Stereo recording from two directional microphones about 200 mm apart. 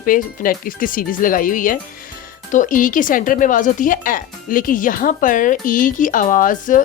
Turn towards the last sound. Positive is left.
turn(degrees=40)  # may be behind; listen again after turning